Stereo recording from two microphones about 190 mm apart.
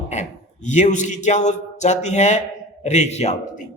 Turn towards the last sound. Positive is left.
turn(degrees=35)  # may be behind; listen again after turning